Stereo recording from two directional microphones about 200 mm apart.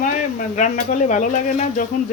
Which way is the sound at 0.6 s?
40° left (ahead or behind).